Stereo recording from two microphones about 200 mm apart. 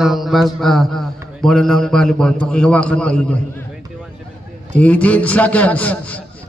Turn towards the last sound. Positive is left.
turn(degrees=5)  # may be behind; listen again after turning